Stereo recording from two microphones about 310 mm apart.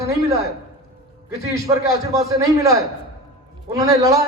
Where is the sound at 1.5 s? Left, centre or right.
Centre.